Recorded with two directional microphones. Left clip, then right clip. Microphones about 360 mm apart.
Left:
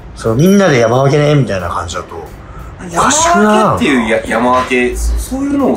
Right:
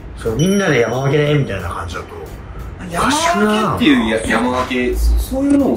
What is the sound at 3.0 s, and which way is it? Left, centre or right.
Speech, centre.